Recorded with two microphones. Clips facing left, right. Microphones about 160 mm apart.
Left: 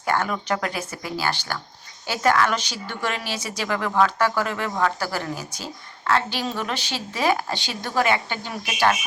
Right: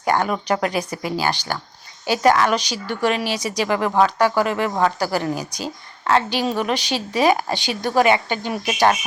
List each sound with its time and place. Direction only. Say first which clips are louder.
0.0 s a woman's voice: right 4 dB; 15° right (ahead or behind)